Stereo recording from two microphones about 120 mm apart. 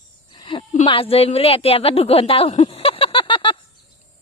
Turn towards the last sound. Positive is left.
turn(degrees=45)  # may be behind; listen again after turning